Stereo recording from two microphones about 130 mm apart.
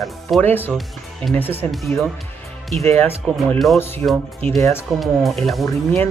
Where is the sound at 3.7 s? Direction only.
15° left (ahead or behind).